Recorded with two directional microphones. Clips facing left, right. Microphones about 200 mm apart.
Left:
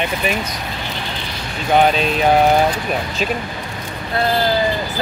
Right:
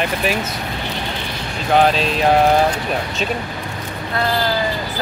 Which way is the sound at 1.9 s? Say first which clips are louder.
Left 1 dB; centre (ahead or behind).